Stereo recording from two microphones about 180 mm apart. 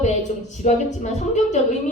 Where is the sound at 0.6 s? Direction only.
40° left (ahead or behind).